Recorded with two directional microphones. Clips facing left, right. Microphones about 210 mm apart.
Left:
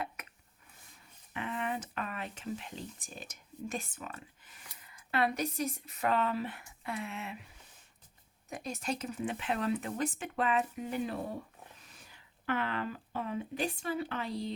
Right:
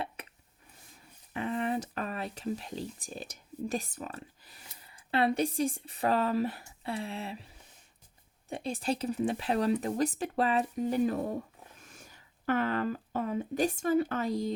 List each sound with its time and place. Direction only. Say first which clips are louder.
0.2 s a sound: right 4 dB; 30° right (ahead or behind)
1.3 s speech: right 5 dB; 35° right (ahead or behind)
8.4 s speech: right 5 dB; 30° right (ahead or behind)